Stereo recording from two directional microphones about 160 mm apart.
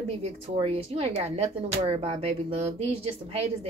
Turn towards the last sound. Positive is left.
turn(degrees=-40)  # may be behind; listen again after turning